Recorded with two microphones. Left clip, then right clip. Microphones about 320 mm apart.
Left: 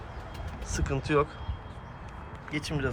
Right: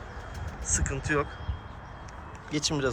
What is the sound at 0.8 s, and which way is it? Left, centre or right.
Speech, centre.